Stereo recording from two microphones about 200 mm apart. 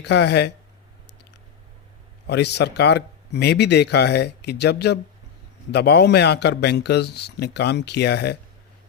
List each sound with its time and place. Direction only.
0.0 s a man's voice: 60° left (ahead or behind)
2.2 s a man's voice: 55° left (ahead or behind)